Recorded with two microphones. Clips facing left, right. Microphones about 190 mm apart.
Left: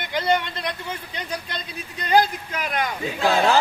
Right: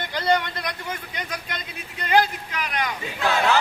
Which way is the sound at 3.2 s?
30° left (ahead or behind).